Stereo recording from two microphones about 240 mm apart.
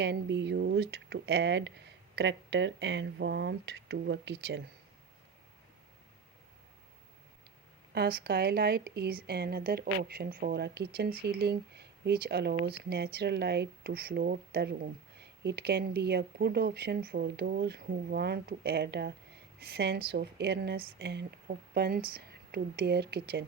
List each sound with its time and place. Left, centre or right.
0.0 s speech: right
7.9 s a woman's voice: right